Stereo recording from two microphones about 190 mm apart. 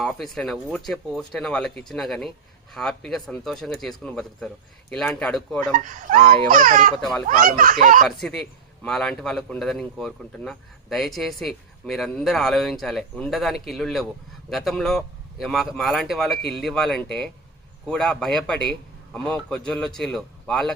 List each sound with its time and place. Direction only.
0.0 s a man's voice: centre (ahead or behind)
5.7 s a child's voice: 45° right (ahead or behind)
8.0 s a man's voice: centre (ahead or behind)